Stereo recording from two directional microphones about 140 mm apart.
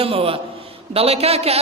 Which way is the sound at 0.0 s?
45° right (ahead or behind).